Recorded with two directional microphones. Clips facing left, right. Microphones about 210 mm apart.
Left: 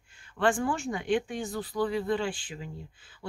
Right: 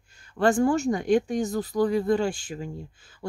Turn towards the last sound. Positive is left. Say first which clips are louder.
# right 5 dB
turn(degrees=-45)  # may be behind; listen again after turning